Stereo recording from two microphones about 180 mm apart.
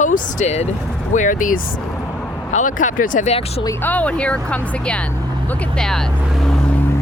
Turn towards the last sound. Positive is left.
turn(degrees=5)  # may be behind; listen again after turning